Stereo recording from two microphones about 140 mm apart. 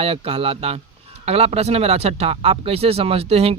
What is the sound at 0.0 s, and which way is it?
Speech, 45° right (ahead or behind).